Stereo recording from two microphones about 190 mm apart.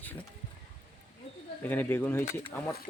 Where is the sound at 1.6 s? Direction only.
10° left (ahead or behind).